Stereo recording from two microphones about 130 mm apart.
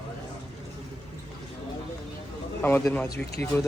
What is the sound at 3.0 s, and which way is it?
Speech, 25° left (ahead or behind).